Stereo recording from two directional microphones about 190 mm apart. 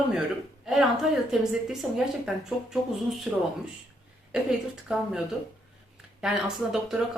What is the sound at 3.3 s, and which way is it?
Speech, 5° right (ahead or behind).